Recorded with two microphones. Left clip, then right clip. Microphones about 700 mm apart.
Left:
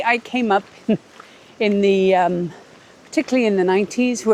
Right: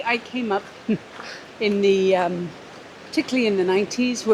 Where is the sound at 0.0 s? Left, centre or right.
Left.